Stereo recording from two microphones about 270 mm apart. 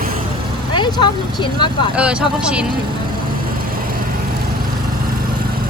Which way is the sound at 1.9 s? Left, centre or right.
Centre.